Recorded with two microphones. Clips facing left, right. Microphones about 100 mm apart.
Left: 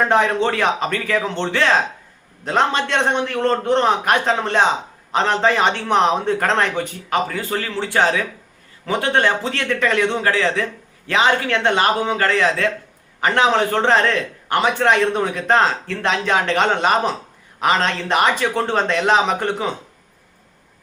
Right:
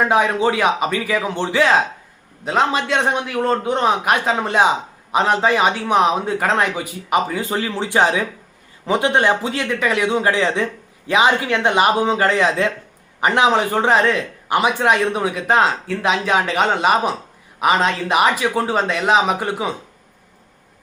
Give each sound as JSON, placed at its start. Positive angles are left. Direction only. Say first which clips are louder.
{"t": 0.0, "sound": "a man's voice", "louder": "even", "side_deg": -5}